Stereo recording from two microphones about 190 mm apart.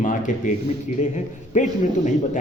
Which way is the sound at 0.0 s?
40° left (ahead or behind).